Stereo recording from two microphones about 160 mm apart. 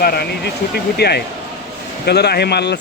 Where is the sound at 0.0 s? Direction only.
80° left.